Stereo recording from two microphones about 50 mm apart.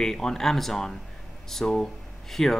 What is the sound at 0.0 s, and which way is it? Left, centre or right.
Speech, centre.